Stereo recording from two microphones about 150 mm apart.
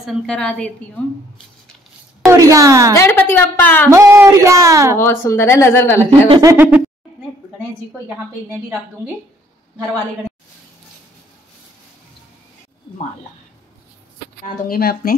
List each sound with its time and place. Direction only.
0.0 s a woman's voice: centre (ahead or behind)
2.2 s a woman's voice: 20° right (ahead or behind)
3.0 s speech: 15° left (ahead or behind)
3.9 s speech: 20° right (ahead or behind)
4.9 s speech: 15° left (ahead or behind)
6.0 s speech: 40° right (ahead or behind)
6.4 s speech: 15° right (ahead or behind)
14.4 s speech: 80° left